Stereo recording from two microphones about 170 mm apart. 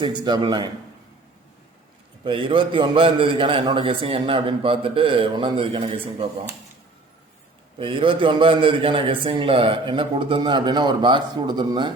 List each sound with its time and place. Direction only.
0.0 s a man's voice: 25° right (ahead or behind)
2.2 s a man's voice: 30° right (ahead or behind)
7.8 s a man's voice: 30° right (ahead or behind)